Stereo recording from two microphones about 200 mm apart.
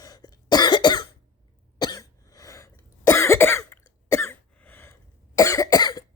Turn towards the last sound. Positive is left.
turn(degrees=20)  # may be behind; listen again after turning